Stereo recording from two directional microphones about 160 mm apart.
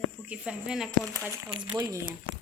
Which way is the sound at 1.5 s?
25° right (ahead or behind).